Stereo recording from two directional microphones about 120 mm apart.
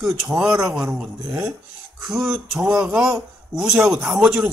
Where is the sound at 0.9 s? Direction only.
10° right (ahead or behind).